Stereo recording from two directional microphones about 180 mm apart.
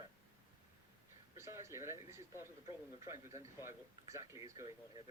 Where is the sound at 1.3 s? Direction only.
15° right (ahead or behind).